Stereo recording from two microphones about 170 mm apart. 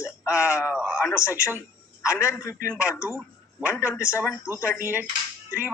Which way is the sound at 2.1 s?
15° left (ahead or behind).